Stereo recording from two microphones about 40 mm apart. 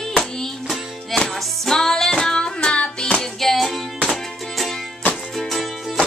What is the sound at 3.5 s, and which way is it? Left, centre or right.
Music, centre.